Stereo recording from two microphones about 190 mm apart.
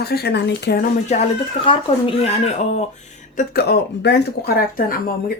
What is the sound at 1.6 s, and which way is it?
Speech, 25° left (ahead or behind).